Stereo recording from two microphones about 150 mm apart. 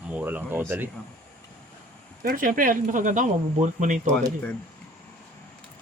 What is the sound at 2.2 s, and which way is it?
Speech, 65° right (ahead or behind).